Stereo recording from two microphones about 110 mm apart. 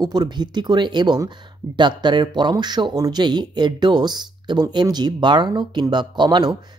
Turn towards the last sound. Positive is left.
turn(degrees=-45)  # may be behind; listen again after turning